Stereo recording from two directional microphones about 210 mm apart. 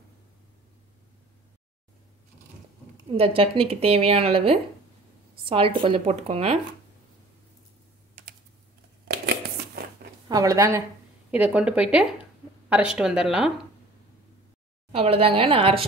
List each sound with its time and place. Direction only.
3.1 s speech: 25° right (ahead or behind)
9.0 s a sound: 50° right (ahead or behind)
10.2 s a woman's voice: 15° right (ahead or behind)
14.9 s speech: 30° right (ahead or behind)